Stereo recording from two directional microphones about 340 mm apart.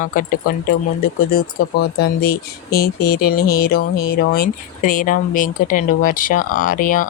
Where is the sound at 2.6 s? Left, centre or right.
Left.